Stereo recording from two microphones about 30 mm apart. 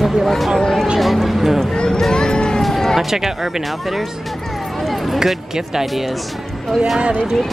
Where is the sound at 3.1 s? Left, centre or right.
Centre.